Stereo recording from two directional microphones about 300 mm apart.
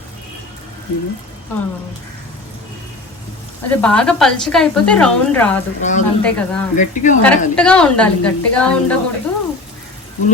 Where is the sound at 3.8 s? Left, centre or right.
Centre.